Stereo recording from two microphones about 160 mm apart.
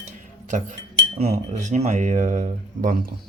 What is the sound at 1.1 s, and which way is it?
Cutlery, 40° right (ahead or behind).